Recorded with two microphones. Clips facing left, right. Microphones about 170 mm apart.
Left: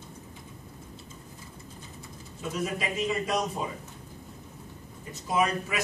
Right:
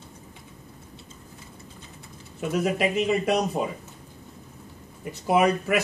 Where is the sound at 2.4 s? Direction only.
65° right (ahead or behind).